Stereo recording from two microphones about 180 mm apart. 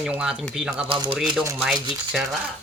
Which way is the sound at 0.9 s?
30° right (ahead or behind).